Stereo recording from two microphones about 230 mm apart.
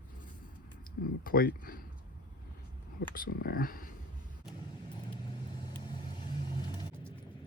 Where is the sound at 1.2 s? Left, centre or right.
Left.